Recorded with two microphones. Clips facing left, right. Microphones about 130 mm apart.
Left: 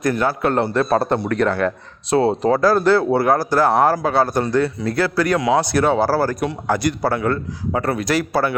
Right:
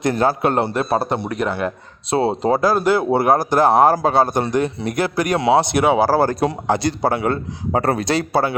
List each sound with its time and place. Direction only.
0.0 s a man's voice: 30° right (ahead or behind)
0.4 s a man's voice: 20° right (ahead or behind)
2.0 s a man's voice: 25° right (ahead or behind)